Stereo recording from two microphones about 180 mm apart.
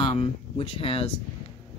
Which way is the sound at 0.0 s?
30° left (ahead or behind).